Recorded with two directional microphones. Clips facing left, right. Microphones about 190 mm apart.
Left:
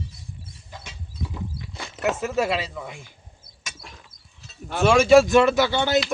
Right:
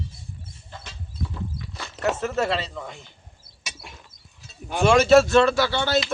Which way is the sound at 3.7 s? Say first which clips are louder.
Right 1 dB; 5° right (ahead or behind).